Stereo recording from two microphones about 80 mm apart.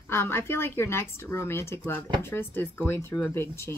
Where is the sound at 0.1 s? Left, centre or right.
Left.